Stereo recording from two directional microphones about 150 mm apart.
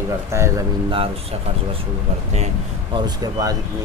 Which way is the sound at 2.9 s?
25° right (ahead or behind).